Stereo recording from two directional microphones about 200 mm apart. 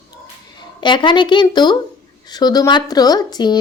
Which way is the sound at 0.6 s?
25° left (ahead or behind).